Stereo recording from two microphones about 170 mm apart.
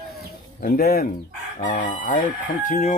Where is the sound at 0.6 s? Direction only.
60° left (ahead or behind).